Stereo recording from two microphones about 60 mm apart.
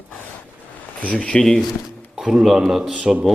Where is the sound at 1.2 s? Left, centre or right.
Centre.